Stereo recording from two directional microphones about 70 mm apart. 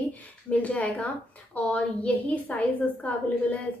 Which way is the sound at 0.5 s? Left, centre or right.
Left.